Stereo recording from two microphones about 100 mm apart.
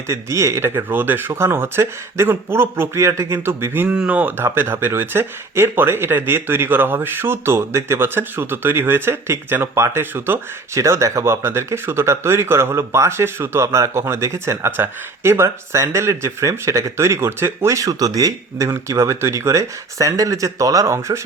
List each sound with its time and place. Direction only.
0.1 s speech: 30° right (ahead or behind)
3.8 s speech: 10° right (ahead or behind); by 21.2 s 30° right (ahead or behind)